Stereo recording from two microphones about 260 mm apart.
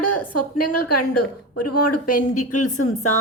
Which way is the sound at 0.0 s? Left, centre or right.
Left.